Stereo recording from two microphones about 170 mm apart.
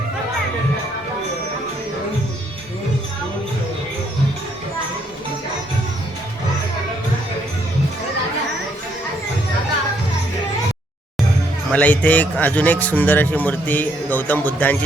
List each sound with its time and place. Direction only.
11.7 s a man's voice: 10° left (ahead or behind)